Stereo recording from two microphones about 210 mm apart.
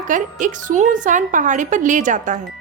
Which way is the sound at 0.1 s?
35° right (ahead or behind).